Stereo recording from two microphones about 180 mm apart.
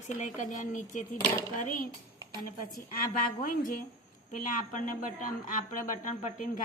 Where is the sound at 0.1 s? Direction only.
45° left (ahead or behind).